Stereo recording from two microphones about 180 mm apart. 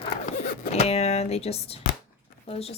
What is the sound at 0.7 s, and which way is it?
Speech, 35° left (ahead or behind).